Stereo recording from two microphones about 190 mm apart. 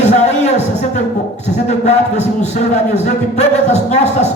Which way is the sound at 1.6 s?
35° left (ahead or behind).